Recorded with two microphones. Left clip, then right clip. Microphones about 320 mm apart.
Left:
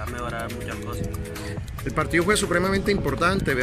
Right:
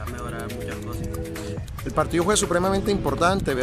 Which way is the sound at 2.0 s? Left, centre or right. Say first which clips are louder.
Even; centre.